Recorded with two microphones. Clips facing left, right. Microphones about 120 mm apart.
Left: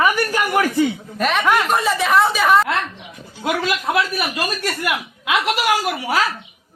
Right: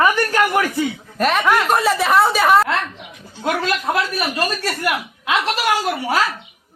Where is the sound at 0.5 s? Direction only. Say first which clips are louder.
Left 2 dB; 20° left (ahead or behind).